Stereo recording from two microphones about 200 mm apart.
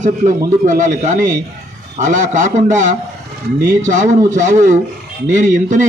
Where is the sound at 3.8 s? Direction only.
40° right (ahead or behind).